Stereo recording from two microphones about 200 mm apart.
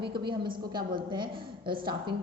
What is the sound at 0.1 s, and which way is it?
A woman's voice, 25° right (ahead or behind).